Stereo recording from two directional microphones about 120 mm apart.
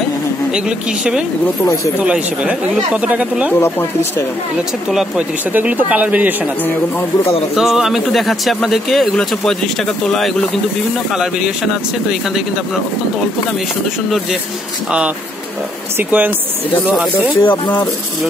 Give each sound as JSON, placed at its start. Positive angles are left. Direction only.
{"t": 0.5, "sound": "speech", "side_deg": -10}
{"t": 5.5, "sound": "speech", "side_deg": -15}
{"t": 6.6, "sound": "a man's voice", "side_deg": 15}
{"t": 7.5, "sound": "speech", "side_deg": -5}
{"t": 16.0, "sound": "speech", "side_deg": -15}
{"t": 16.8, "sound": "speech", "side_deg": -5}
{"t": 17.5, "sound": "a man's voice", "side_deg": 15}